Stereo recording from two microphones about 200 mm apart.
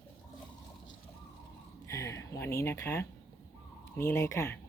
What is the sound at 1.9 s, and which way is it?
Speech, 15° left (ahead or behind).